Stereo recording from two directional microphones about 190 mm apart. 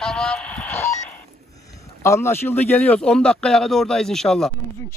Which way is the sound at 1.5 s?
15° left (ahead or behind).